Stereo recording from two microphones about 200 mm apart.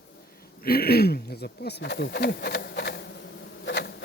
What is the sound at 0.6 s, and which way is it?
Speech, 50° left (ahead or behind).